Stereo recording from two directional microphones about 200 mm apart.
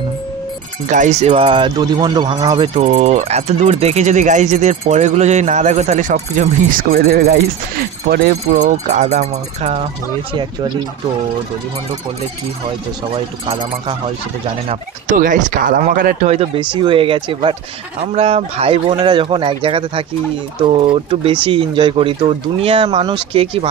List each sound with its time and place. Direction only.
0.8 s speech: 40° right (ahead or behind)
8.5 s speech: 40° right (ahead or behind)
12.6 s speech: 25° right (ahead or behind)
14.7 s speech: 40° right (ahead or behind)